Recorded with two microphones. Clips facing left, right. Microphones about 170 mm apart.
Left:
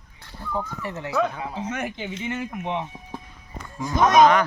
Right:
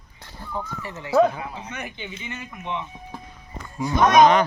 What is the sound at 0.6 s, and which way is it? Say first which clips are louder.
Speech: left 3 dB; 55° left (ahead or behind).